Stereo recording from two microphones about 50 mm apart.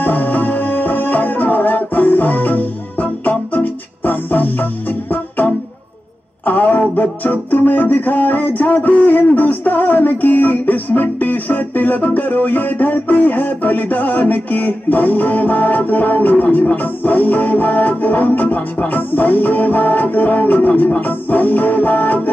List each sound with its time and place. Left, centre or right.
0.0 s music: left
6.4 s a sound: left
7.0 s music: left